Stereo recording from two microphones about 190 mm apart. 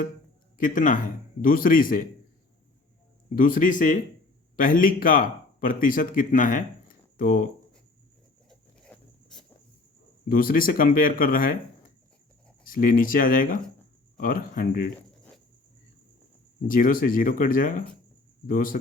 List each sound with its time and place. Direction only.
0.6 s speech: 45° left (ahead or behind)
3.3 s speech: 45° left (ahead or behind)
8.4 s a sound: 5° left (ahead or behind)
10.2 s speech: 50° left (ahead or behind)
16.6 s speech: 45° left (ahead or behind)